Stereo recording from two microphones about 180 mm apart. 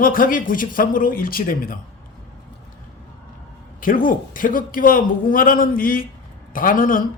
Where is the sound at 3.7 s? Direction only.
50° left (ahead or behind).